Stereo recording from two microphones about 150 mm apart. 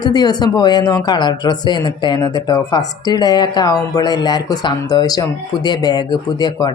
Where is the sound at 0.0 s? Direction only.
25° left (ahead or behind).